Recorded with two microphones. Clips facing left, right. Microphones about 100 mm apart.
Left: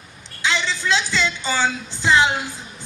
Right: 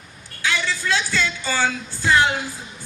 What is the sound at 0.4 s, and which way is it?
Music, 20° left (ahead or behind).